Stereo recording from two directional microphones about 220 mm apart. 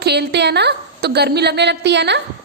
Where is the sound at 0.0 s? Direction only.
50° right (ahead or behind).